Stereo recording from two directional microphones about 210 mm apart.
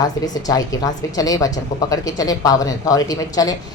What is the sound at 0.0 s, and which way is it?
A woman's voice, 15° left (ahead or behind).